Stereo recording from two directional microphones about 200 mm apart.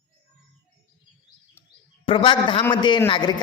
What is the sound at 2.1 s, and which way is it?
A man's voice, 25° left (ahead or behind).